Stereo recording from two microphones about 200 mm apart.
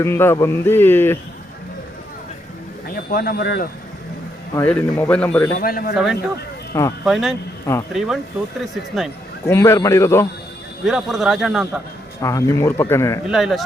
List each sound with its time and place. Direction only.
0.0 s speech: 10° left (ahead or behind)
2.9 s speech: 45° left (ahead or behind)
4.5 s speech: 10° left (ahead or behind)
5.5 s speech: 45° left (ahead or behind)
5.9 s a man's voice: centre (ahead or behind)
9.5 s speech: 15° left (ahead or behind)
10.8 s a man's voice: centre (ahead or behind)
12.2 s speech: 15° left (ahead or behind)
13.2 s a man's voice: centre (ahead or behind)